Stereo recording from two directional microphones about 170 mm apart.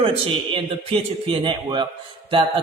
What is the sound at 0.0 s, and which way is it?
A man's voice, 30° right (ahead or behind).